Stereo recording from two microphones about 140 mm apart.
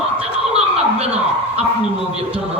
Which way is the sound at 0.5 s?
50° right (ahead or behind).